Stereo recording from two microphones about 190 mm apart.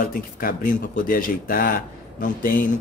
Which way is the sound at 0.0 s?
50° left (ahead or behind).